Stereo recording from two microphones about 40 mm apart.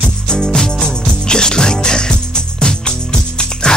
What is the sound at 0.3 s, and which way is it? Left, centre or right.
Music, centre.